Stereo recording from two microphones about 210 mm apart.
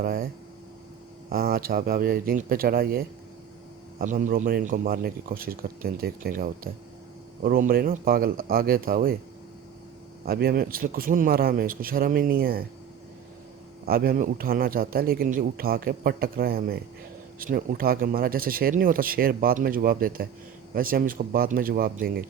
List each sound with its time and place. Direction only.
0.0 s a man's voice: 45° right (ahead or behind)
1.3 s a man's voice: 45° right (ahead or behind)
10.2 s a man's voice: 45° right (ahead or behind)
13.8 s a man's voice: 45° right (ahead or behind)